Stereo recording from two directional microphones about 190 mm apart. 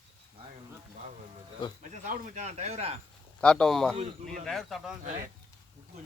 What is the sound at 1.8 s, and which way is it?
Speech, 40° right (ahead or behind).